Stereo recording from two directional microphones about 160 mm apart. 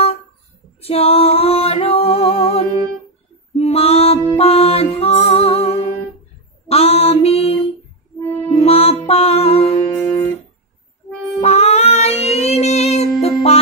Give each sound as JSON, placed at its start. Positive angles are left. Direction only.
{"t": 0.7, "sound": "music", "side_deg": 35}
{"t": 3.5, "sound": "female singing", "side_deg": 40}
{"t": 4.4, "sound": "music", "side_deg": 40}
{"t": 6.7, "sound": "a sound", "side_deg": 40}
{"t": 8.5, "sound": "music", "side_deg": 40}
{"t": 11.4, "sound": "female singing", "side_deg": 40}